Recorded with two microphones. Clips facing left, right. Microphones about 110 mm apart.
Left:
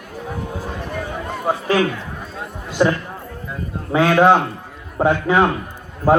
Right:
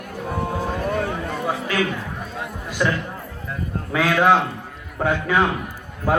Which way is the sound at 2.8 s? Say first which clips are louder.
Left 5 dB; 30° left (ahead or behind).